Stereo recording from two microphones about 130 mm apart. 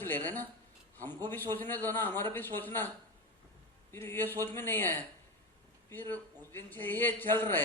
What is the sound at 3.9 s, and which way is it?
A man's voice, 20° left (ahead or behind).